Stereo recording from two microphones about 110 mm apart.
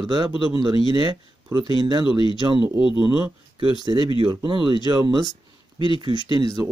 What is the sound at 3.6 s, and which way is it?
Speech, 40° right (ahead or behind).